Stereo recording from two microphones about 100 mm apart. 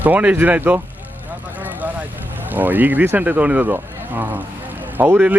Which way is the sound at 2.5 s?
20° right (ahead or behind).